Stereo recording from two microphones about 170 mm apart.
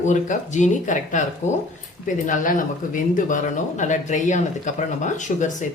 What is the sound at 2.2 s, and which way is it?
Speech, 50° left (ahead or behind).